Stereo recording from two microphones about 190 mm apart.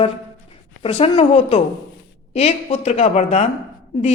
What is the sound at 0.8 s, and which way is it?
A woman's voice, 30° left (ahead or behind).